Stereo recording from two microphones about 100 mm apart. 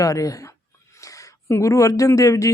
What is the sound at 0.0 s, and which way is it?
A woman's voice, 35° left (ahead or behind).